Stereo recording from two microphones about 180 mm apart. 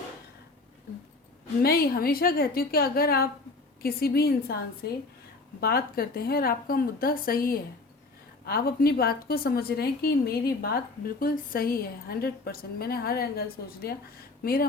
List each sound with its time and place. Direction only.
1.6 s a woman's voice: 55° left (ahead or behind)